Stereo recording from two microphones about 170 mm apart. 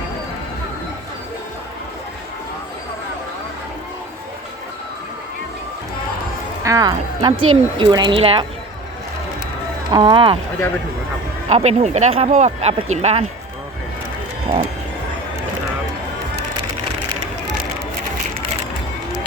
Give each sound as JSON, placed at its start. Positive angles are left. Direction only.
{"t": 6.7, "sound": "speech", "side_deg": -20}
{"t": 9.9, "sound": "speech", "side_deg": -30}
{"t": 11.4, "sound": "speech", "side_deg": -40}